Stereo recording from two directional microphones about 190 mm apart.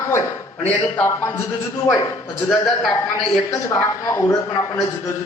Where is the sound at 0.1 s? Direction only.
10° left (ahead or behind).